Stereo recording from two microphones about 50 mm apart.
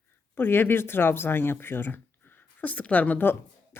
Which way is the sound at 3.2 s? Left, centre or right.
Left.